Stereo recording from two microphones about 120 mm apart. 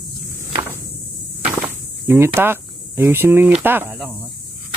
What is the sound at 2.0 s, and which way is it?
Speech, 20° right (ahead or behind).